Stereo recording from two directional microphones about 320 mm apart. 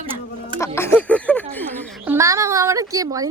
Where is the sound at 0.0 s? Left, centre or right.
Centre.